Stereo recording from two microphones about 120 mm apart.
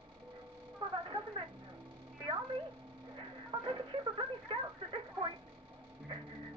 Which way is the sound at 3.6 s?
45° right (ahead or behind).